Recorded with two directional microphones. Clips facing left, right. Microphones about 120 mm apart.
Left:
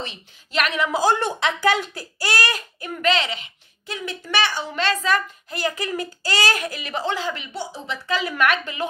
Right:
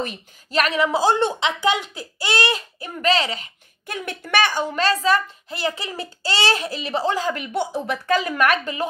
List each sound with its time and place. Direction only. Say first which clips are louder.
0.0 s a child's voice: right 5 dB; 40° right (ahead or behind)
1.4 s a child's voice: left 1 dB; 20° right (ahead or behind); by 7.4 s 40° right (ahead or behind)
7.5 s speech: right 7 dB; 55° right (ahead or behind); by 8.8 s 40° right (ahead or behind)